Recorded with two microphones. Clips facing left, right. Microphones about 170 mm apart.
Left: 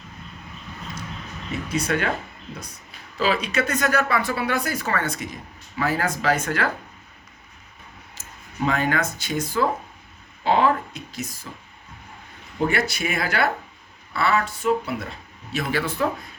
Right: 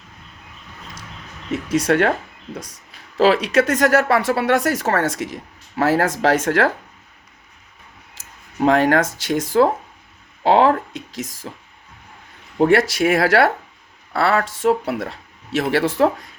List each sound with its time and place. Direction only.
1.5 s speech: 90° right
3.2 s speech: 85° right
8.2 s a sound: 90° right
8.6 s speech: 85° right
12.5 s speech: 90° right